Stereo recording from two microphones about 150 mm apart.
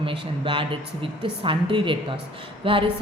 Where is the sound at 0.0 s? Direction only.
35° right (ahead or behind).